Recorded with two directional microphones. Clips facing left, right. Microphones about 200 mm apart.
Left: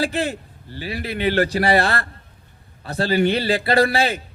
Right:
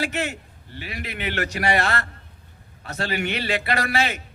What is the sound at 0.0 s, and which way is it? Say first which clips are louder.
A man's voice: left 4 dB; 35° left (ahead or behind).